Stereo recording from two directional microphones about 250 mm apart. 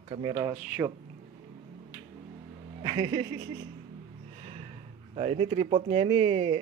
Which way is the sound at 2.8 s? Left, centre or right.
Centre.